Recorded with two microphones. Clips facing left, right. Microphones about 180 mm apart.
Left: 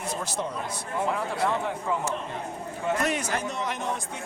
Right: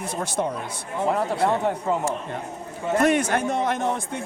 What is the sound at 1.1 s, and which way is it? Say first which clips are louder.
Speech: right 8 dB; 40° right (ahead or behind).